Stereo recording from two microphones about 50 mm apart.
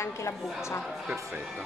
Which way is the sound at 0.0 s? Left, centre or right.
Left.